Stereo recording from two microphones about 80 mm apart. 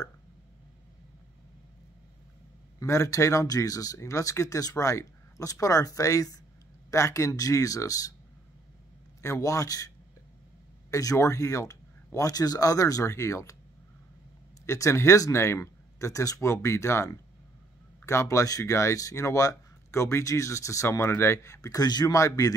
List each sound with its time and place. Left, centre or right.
2.8 s speech: left
9.2 s speech: left
14.7 s speech: left
22.1 s speech: left